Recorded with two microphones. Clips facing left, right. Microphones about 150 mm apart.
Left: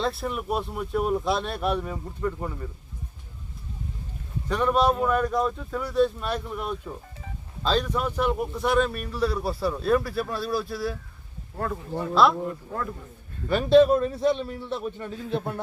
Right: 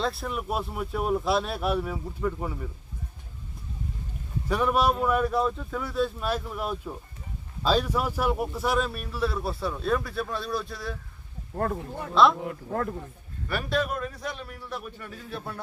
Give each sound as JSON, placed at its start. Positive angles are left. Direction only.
{"t": 0.0, "sound": "a man's voice", "side_deg": 0}
{"t": 4.4, "sound": "a man's voice", "side_deg": -10}
{"t": 11.5, "sound": "speech", "side_deg": -40}
{"t": 12.1, "sound": "a man's voice", "side_deg": 0}
{"t": 12.5, "sound": "speech", "side_deg": -50}
{"t": 13.5, "sound": "a man's voice", "side_deg": 25}